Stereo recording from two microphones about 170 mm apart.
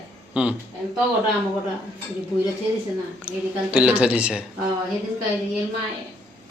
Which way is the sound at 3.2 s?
5° right (ahead or behind).